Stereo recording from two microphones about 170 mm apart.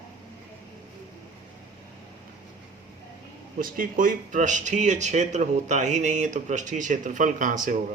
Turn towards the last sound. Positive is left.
turn(degrees=-50)  # may be behind; listen again after turning